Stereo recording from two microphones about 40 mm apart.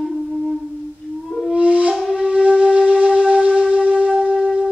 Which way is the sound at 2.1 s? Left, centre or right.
Right.